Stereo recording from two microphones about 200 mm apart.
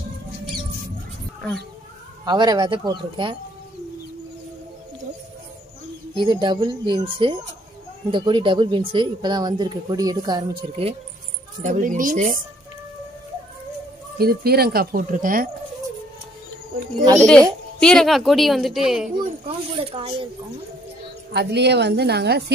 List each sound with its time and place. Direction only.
2.2 s speech: 20° right (ahead or behind)
6.1 s speech: 20° right (ahead or behind)
11.6 s speech: 35° right (ahead or behind)
14.1 s speech: 50° right (ahead or behind)
17.3 s a woman's voice: 5° left (ahead or behind)
19.4 s speech: 30° right (ahead or behind)
21.3 s a woman's voice: 55° right (ahead or behind)